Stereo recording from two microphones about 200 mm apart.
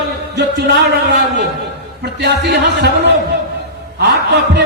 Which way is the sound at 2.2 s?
55° right (ahead or behind).